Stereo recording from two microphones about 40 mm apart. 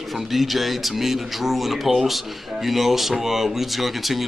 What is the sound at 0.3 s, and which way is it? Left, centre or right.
Speech, centre.